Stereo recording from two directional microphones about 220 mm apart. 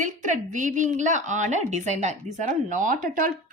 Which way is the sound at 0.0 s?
35° right (ahead or behind).